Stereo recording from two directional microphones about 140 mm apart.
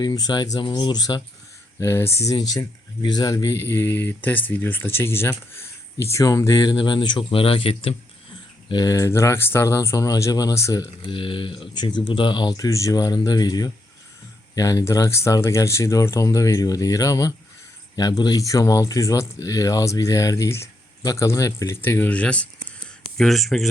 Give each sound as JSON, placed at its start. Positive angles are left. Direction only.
{"t": 0.0, "sound": "speech", "side_deg": 30}
{"t": 1.8, "sound": "speech", "side_deg": 20}
{"t": 8.7, "sound": "speech", "side_deg": 25}
{"t": 11.1, "sound": "speech", "side_deg": 35}